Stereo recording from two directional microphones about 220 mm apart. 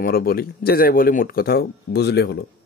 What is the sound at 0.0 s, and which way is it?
Speech, 45° left (ahead or behind).